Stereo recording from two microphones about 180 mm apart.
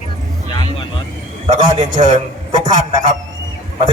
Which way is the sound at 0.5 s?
25° left (ahead or behind).